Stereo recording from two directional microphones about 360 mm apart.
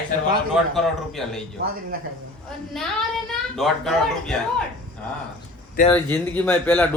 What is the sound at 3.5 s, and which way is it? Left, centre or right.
Speech, centre.